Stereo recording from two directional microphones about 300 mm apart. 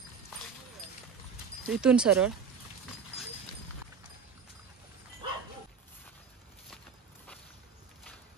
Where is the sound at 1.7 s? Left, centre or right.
Centre.